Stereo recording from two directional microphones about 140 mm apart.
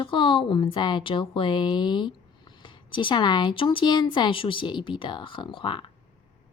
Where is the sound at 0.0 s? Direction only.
40° left (ahead or behind).